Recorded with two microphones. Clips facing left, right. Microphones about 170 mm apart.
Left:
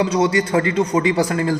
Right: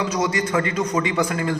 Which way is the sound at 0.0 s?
30° left (ahead or behind).